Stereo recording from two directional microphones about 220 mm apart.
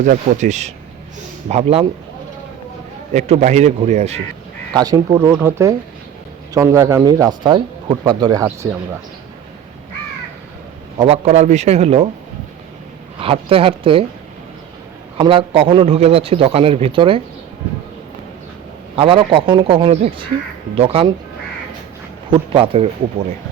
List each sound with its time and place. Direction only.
0.0 s a man's voice: 35° right (ahead or behind)
3.1 s a man's voice: 30° right (ahead or behind)
4.7 s speech: 15° right (ahead or behind)
10.9 s a man's voice: 25° right (ahead or behind)
13.1 s a man's voice: 25° right (ahead or behind)
15.2 s a man's voice: 25° right (ahead or behind)
18.9 s a man's voice: 25° right (ahead or behind)
22.3 s a man's voice: 25° right (ahead or behind)